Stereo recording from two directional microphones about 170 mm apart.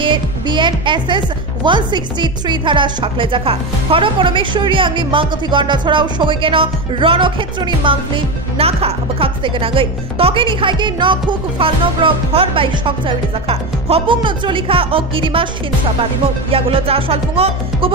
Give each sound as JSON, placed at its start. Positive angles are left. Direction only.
{"t": 0.0, "sound": "a woman's voice", "side_deg": -30}
{"t": 16.5, "sound": "speech", "side_deg": -35}